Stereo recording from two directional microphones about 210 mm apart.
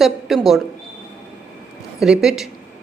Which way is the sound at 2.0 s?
5° right (ahead or behind).